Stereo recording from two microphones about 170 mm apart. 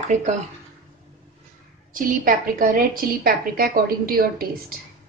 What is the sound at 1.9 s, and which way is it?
A woman's voice, 55° right (ahead or behind).